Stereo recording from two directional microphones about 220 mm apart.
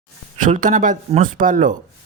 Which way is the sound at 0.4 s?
35° right (ahead or behind).